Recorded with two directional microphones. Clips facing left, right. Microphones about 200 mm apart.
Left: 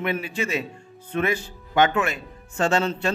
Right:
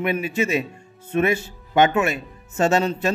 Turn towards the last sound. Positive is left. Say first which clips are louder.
# right 3 dB
turn(degrees=-20)  # may be behind; listen again after turning